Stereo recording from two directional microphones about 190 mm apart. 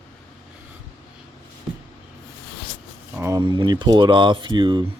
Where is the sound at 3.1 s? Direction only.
15° right (ahead or behind).